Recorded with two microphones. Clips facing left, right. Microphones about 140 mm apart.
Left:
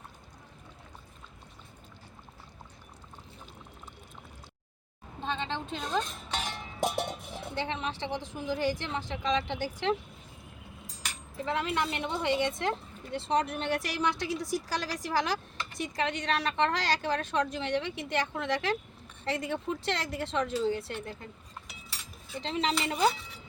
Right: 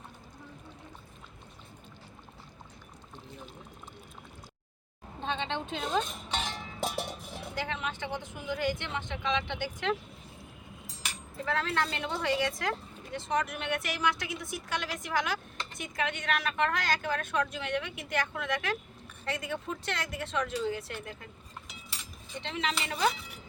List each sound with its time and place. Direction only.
5.2 s speech: centre (ahead or behind)
6.4 s a woman's voice: 15° left (ahead or behind); by 9.9 s 35° left (ahead or behind)
11.4 s a woman's voice: 15° left (ahead or behind); by 21.2 s 30° left (ahead or behind)
22.4 s a woman's voice: 35° left (ahead or behind)